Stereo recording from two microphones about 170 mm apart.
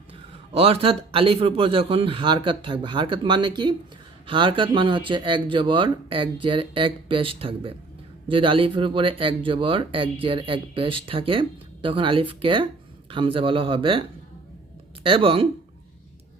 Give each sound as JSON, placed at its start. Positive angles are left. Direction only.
{"t": 0.5, "sound": "speech", "side_deg": -35}
{"t": 15.0, "sound": "speech", "side_deg": -30}